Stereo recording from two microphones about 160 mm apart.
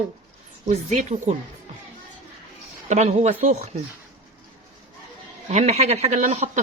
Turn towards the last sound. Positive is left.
turn(degrees=-50)  # may be behind; listen again after turning